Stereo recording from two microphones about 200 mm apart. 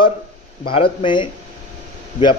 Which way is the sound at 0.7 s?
25° left (ahead or behind).